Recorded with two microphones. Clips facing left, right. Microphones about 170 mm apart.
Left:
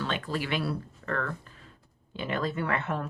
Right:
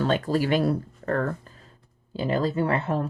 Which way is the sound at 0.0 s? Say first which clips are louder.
Right 8 dB; 40° right (ahead or behind).